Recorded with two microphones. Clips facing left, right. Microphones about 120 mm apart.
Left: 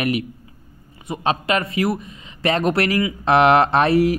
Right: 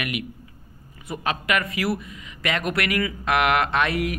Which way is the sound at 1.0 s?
25° left (ahead or behind).